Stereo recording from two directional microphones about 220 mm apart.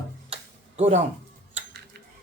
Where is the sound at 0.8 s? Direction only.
30° right (ahead or behind).